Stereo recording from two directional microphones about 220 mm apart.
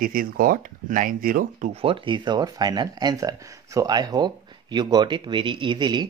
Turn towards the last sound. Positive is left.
turn(degrees=-20)  # may be behind; listen again after turning